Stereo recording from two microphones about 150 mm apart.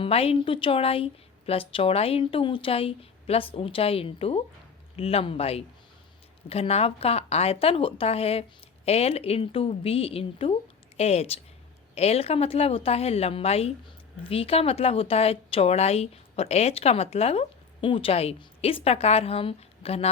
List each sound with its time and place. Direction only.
0.0 s a woman's voice: 40° left (ahead or behind)